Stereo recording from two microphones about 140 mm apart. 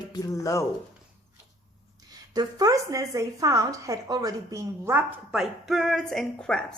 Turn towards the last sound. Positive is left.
turn(degrees=5)  # may be behind; listen again after turning